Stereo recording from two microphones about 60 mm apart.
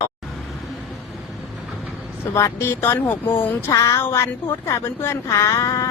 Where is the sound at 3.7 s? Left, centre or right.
Left.